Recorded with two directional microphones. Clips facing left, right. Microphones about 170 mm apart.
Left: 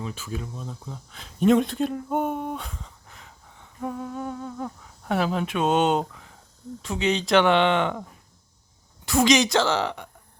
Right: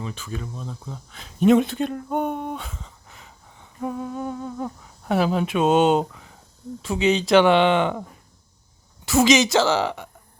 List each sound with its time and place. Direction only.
0.0 s speech: 5° left (ahead or behind)
9.0 s a woman's voice: 5° right (ahead or behind)